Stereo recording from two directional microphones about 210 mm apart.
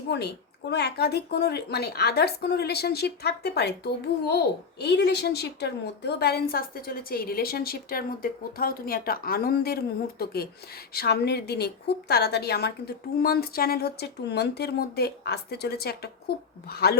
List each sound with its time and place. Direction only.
0.1 s a woman's voice: 50° left (ahead or behind)